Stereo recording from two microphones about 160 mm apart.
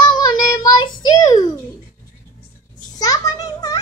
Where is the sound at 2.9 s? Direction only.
25° left (ahead or behind).